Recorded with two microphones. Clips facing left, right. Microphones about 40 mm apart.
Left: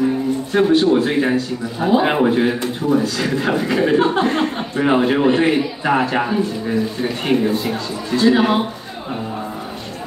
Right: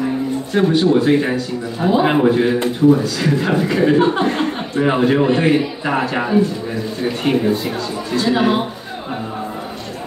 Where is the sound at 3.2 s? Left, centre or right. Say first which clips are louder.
Right 2 dB; centre.